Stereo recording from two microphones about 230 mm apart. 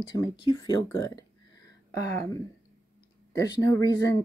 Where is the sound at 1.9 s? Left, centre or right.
Centre.